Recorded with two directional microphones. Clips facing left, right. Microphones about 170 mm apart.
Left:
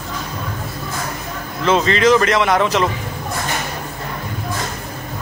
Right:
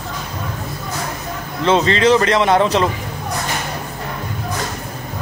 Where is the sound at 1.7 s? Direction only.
30° right (ahead or behind).